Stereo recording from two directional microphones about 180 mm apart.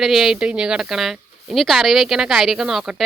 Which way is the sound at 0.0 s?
Centre (ahead or behind).